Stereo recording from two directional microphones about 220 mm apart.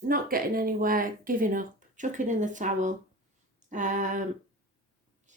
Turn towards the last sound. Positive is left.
turn(degrees=-35)  # may be behind; listen again after turning